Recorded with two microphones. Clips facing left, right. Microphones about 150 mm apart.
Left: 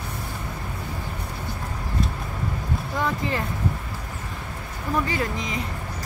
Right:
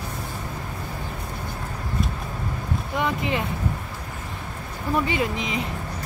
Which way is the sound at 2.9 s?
20° right (ahead or behind).